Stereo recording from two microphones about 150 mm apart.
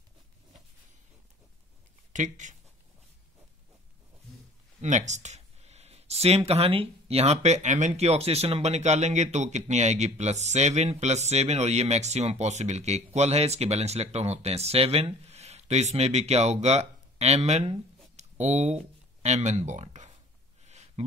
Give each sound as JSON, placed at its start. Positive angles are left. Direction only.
{"t": 2.1, "sound": "speech", "side_deg": -55}
{"t": 4.8, "sound": "speech", "side_deg": -55}
{"t": 20.6, "sound": "a sound", "side_deg": -50}